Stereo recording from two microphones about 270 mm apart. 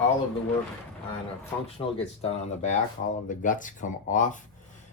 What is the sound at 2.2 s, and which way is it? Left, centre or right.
Speech, left.